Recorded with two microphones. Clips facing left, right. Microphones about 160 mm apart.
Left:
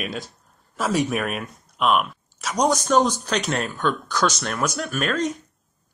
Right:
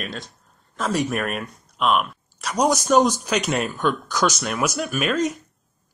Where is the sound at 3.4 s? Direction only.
Centre (ahead or behind).